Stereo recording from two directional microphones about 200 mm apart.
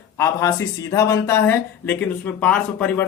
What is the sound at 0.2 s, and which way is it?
Speech, 15° left (ahead or behind).